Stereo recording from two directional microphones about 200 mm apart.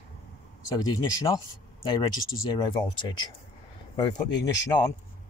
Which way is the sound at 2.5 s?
20° left (ahead or behind).